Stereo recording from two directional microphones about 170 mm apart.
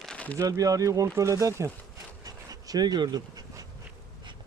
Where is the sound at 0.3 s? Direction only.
20° right (ahead or behind).